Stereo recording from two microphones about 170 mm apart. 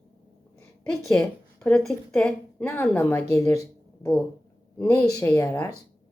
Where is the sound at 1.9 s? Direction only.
5° left (ahead or behind).